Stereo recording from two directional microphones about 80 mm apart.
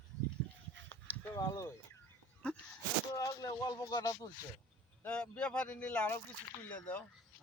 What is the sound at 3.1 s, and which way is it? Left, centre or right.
Speech, left.